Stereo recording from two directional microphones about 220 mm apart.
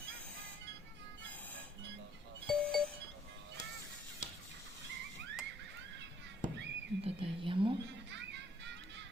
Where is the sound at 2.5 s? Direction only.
5° left (ahead or behind).